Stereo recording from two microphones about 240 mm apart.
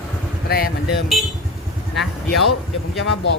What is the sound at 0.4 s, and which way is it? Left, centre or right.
Speech, left.